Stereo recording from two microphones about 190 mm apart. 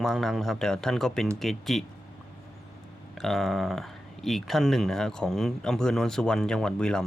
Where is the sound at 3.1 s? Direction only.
Centre (ahead or behind).